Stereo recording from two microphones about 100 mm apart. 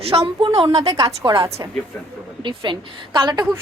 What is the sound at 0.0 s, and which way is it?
Speech, 80° right.